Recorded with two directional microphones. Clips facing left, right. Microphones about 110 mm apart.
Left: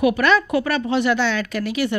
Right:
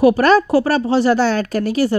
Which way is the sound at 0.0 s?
40° right (ahead or behind).